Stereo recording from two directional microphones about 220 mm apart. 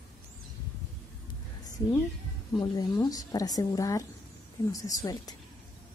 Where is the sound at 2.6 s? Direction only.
20° left (ahead or behind).